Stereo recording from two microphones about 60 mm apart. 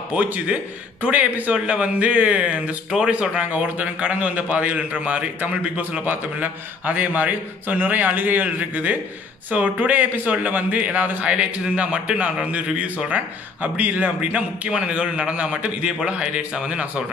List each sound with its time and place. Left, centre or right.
0.1 s a man's voice: right